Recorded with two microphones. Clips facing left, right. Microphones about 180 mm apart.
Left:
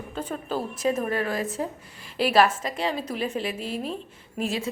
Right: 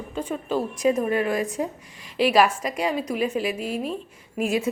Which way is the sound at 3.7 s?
5° right (ahead or behind).